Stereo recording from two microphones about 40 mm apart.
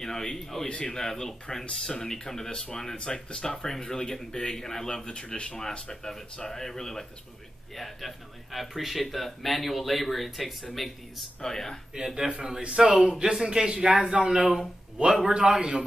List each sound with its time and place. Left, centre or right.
0.0 s speech: centre
3.8 s speech: centre
11.4 s speech: centre
11.9 s a man's voice: centre